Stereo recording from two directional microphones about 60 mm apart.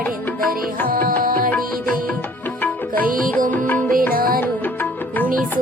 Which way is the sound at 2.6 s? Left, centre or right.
Left.